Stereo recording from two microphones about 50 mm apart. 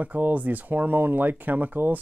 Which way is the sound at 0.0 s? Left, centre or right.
Right.